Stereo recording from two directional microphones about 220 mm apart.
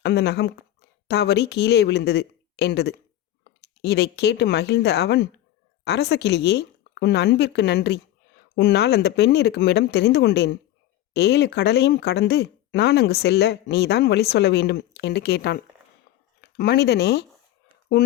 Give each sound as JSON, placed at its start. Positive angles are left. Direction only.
{"t": 0.0, "sound": "speech", "side_deg": 50}